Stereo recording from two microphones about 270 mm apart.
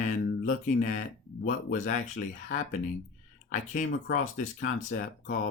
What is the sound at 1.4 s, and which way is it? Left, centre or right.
Speech, left.